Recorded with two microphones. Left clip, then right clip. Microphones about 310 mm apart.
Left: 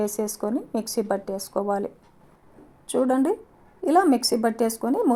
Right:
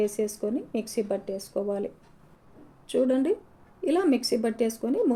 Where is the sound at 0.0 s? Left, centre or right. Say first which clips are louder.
Left 1 dB; left.